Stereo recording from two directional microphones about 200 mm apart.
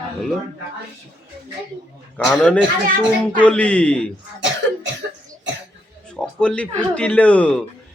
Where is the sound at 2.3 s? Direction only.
5° left (ahead or behind).